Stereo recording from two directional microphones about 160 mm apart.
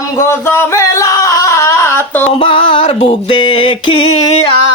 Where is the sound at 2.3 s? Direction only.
30° left (ahead or behind).